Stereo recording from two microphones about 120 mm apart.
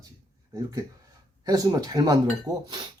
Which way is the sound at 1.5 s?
30° right (ahead or behind).